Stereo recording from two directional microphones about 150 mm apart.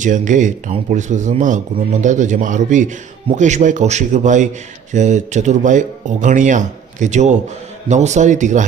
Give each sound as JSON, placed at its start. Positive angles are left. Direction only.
{"t": 0.0, "sound": "speech", "side_deg": -60}